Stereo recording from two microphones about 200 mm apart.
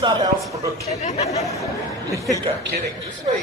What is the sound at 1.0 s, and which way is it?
Speech, 35° left (ahead or behind).